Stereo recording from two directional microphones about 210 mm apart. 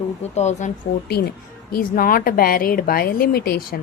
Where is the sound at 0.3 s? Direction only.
35° left (ahead or behind).